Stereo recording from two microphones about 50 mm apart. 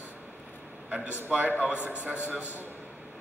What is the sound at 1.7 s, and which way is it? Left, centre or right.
Speech, left.